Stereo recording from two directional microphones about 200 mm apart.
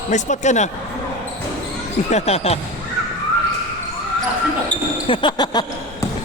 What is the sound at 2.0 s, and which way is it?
Speech, 35° left (ahead or behind).